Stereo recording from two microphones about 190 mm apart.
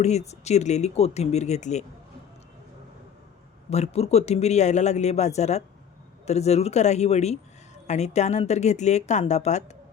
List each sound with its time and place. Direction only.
0.0 s speech: 35° left (ahead or behind)
3.7 s speech: 35° left (ahead or behind)